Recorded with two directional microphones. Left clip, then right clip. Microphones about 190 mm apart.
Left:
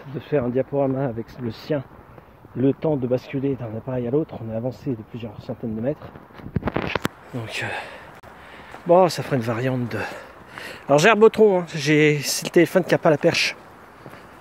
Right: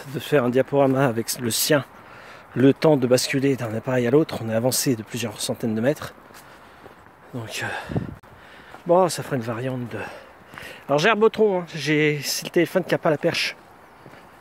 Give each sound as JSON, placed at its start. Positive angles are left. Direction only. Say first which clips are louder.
{"t": 0.1, "sound": "speech", "louder": "right 3 dB", "side_deg": -30}
{"t": 7.3, "sound": "speech", "louder": "right 3 dB", "side_deg": -25}
{"t": 9.3, "sound": "a man's voice", "louder": "left 3 dB", "side_deg": -5}